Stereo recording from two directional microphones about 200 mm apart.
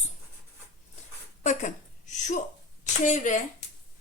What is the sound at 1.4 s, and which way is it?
A woman's voice, 35° left (ahead or behind).